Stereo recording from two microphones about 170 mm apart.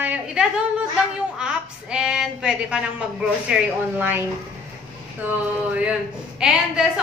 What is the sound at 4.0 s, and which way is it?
Child singing, 10° right (ahead or behind).